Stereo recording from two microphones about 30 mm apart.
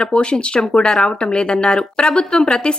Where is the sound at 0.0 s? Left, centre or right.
Left.